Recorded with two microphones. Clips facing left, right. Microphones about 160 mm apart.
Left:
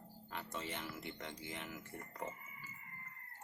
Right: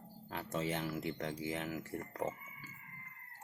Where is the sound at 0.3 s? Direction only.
40° right (ahead or behind).